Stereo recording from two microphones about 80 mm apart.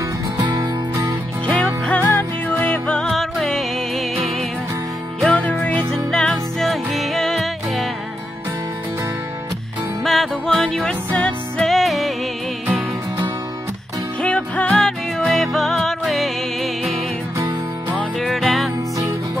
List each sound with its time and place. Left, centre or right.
0.5 s music: right
1.4 s music: centre
3.0 s music: centre
5.3 s music: centre
6.0 s music: centre
10.0 s music: centre
11.6 s music: centre
14.2 s music: centre